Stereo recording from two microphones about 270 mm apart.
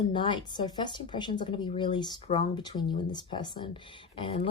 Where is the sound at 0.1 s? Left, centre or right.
Centre.